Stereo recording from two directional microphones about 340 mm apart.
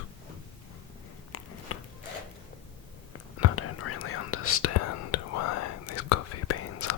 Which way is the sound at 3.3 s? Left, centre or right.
Left.